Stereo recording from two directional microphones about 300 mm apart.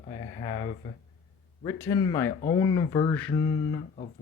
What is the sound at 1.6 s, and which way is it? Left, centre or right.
A man's voice, centre.